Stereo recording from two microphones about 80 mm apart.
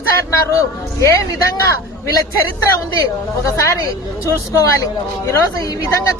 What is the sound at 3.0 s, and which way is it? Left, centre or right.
Speech, left.